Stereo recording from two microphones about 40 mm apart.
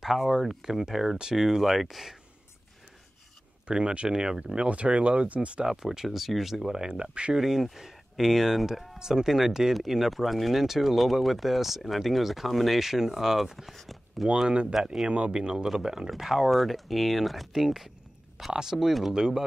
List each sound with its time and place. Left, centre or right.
0.0 s speech: centre
3.6 s speech: right
4.1 s speech: centre
4.6 s speech: right
5.7 s speech: centre
7.0 s speech: right
7.3 s speech: centre
14.7 s speech: centre
15.0 s speech: right
15.3 s speech: centre
16.1 s speech: centre
19.1 s speech: centre